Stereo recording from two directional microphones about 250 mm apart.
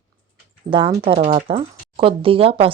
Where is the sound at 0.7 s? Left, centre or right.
Centre.